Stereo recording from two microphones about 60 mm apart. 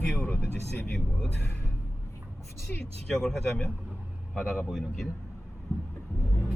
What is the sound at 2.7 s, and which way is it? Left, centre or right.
Speech, left.